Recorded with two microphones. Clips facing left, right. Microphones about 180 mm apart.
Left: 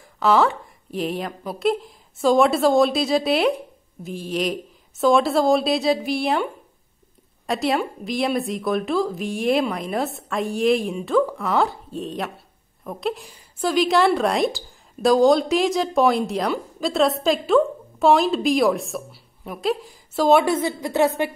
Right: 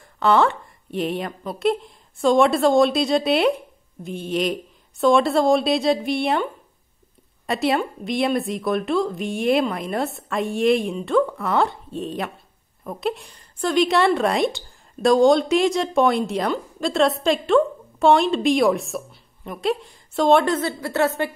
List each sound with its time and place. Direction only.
0.2 s a woman's voice: centre (ahead or behind)